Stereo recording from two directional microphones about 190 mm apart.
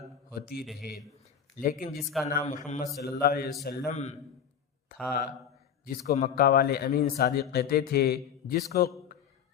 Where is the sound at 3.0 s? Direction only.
50° left (ahead or behind).